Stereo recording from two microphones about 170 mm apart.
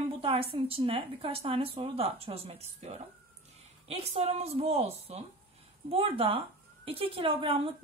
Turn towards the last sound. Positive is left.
turn(degrees=-35)  # may be behind; listen again after turning